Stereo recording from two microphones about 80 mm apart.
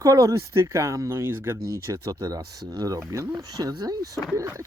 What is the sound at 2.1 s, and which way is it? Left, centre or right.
Speech, right.